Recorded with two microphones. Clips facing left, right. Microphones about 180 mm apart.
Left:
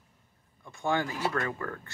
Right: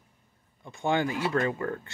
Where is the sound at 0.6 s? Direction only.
20° right (ahead or behind).